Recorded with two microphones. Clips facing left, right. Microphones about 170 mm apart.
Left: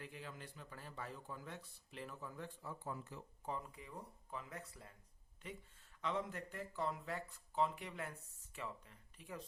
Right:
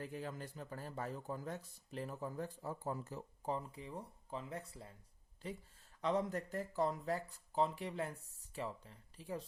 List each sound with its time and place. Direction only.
0.0 s a man's voice: 40° right (ahead or behind)